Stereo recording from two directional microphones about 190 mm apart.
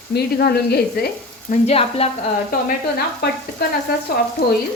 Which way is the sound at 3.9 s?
55° left (ahead or behind).